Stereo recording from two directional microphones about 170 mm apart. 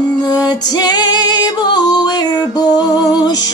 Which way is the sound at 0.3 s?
25° left (ahead or behind).